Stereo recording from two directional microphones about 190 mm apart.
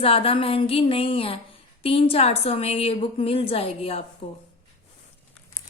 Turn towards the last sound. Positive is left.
turn(degrees=30)  # may be behind; listen again after turning